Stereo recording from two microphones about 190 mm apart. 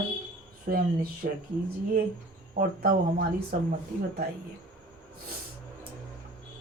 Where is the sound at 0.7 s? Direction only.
50° right (ahead or behind).